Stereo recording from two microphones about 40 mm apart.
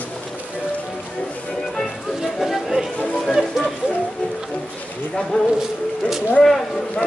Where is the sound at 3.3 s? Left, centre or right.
Centre.